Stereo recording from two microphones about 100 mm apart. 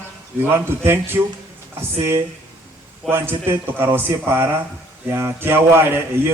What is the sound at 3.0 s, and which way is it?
A man's voice, 20° right (ahead or behind).